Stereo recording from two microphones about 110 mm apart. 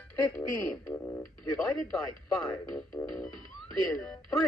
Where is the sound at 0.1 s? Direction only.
20° left (ahead or behind).